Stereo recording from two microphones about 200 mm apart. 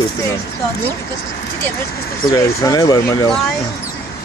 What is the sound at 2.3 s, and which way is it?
Speech, 15° left (ahead or behind).